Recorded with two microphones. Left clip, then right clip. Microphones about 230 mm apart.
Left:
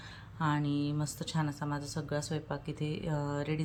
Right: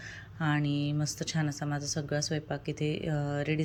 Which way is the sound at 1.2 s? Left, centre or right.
Centre.